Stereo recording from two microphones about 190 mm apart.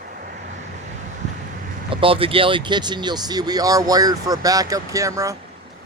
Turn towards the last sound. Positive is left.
turn(degrees=-15)  # may be behind; listen again after turning